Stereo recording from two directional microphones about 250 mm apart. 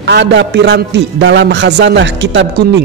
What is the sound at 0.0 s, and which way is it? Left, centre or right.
A man's voice, right.